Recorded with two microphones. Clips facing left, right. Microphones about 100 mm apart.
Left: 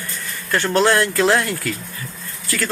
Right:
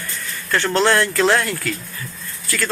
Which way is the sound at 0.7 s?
20° left (ahead or behind).